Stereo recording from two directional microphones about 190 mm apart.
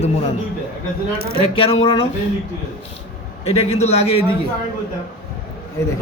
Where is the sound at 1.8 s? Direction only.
30° left (ahead or behind).